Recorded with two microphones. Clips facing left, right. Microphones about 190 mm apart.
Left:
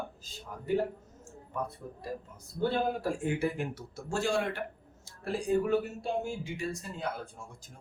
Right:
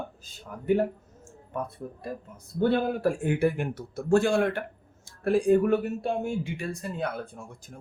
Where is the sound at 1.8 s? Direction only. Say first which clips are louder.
Right 3 dB; 60° right (ahead or behind).